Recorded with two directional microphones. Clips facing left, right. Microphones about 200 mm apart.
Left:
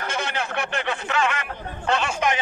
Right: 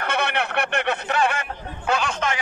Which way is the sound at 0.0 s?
60° right (ahead or behind).